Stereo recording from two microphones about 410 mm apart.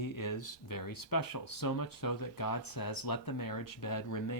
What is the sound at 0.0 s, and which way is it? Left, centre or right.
Speech, left.